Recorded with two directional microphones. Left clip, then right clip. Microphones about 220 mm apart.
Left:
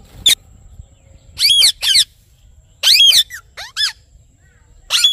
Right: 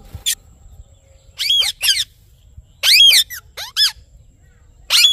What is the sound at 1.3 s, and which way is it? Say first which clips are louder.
Bird: left 5 dB; 40° left (ahead or behind).